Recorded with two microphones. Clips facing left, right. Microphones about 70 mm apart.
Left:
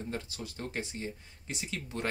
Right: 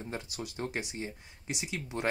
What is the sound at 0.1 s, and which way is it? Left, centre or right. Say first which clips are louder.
Speech: even; right.